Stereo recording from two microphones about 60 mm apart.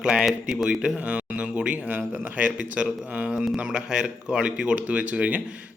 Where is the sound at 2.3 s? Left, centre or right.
Right.